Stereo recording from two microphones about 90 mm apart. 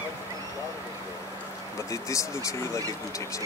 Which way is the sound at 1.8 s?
35° left (ahead or behind).